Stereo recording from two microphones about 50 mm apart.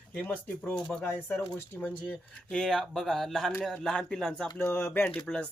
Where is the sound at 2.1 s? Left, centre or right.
Centre.